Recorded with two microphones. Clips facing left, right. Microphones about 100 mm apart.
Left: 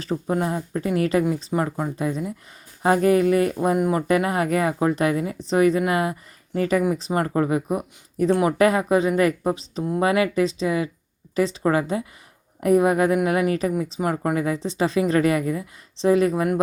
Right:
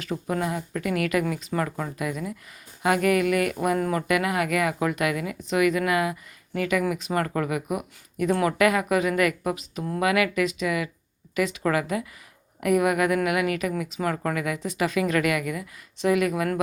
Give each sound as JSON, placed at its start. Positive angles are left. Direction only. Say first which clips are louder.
{"t": 0.0, "sound": "speech", "louder": "left 4 dB", "side_deg": 30}
{"t": 4.1, "sound": "speech", "louder": "left 2 dB", "side_deg": 35}